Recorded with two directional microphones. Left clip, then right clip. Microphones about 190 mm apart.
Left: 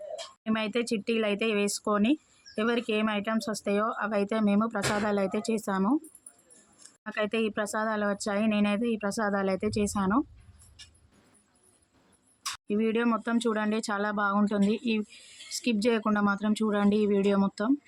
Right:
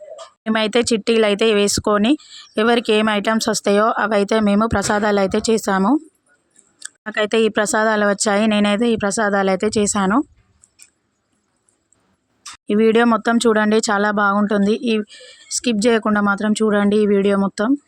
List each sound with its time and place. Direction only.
0.4 s speech: 50° right (ahead or behind)
12.6 s speech: 50° right (ahead or behind)